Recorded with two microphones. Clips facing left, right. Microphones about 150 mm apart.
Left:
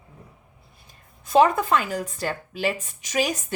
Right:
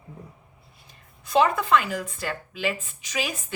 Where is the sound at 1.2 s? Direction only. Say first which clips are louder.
Left 3 dB; 45° left (ahead or behind).